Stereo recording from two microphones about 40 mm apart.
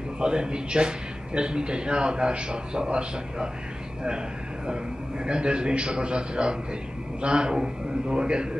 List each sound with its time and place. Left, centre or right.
0.2 s a man's voice: right
5.2 s a man's voice: right